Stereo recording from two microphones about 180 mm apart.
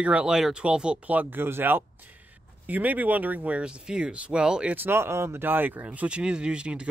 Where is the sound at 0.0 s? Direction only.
5° right (ahead or behind).